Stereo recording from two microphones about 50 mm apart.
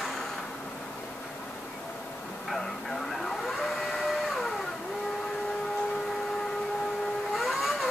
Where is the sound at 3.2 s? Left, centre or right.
Centre.